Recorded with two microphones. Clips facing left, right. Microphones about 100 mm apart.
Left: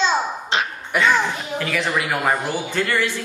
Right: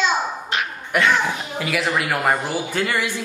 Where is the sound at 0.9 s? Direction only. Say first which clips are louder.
Even; centre (ahead or behind).